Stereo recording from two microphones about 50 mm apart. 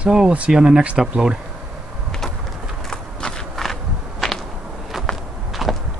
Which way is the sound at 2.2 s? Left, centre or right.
Centre.